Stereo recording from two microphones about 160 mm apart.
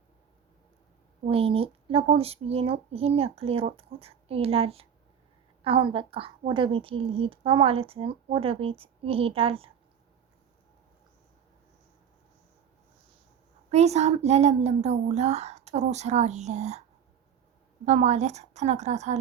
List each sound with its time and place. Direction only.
1.3 s a woman's voice: 35° right (ahead or behind)
13.7 s a woman's voice: 40° right (ahead or behind)
17.8 s a woman's voice: 45° right (ahead or behind)